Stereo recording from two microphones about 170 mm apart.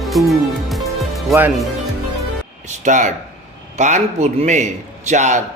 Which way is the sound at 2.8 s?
45° right (ahead or behind).